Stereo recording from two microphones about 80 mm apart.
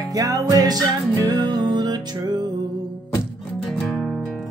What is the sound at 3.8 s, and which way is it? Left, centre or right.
Music, centre.